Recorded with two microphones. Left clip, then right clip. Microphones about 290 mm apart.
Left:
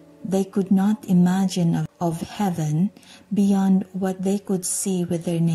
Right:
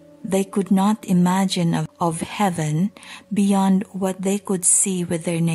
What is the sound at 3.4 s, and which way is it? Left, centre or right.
Speech, right.